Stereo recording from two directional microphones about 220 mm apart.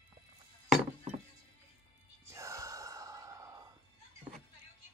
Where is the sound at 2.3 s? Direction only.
15° right (ahead or behind).